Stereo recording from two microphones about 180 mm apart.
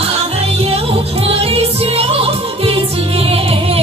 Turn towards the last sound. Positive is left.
turn(degrees=-30)  # may be behind; listen again after turning